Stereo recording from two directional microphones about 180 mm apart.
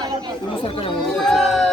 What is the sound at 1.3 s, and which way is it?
Speech, centre (ahead or behind).